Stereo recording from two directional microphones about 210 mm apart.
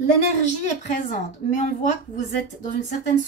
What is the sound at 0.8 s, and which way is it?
Speech, 35° left (ahead or behind).